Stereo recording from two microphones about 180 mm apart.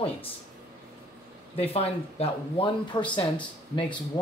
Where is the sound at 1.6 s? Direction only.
35° left (ahead or behind).